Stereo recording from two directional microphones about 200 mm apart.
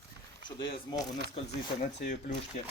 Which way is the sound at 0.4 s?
25° left (ahead or behind).